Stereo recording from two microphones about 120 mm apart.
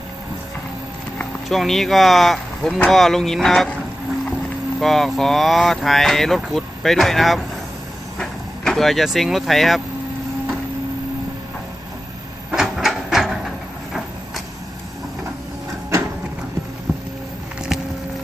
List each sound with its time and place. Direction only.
1.5 s speech: centre (ahead or behind)
4.8 s speech: centre (ahead or behind)
12.5 s a sound: 5° right (ahead or behind)